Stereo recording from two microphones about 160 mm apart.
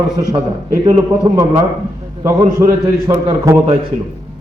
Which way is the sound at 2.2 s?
20° right (ahead or behind).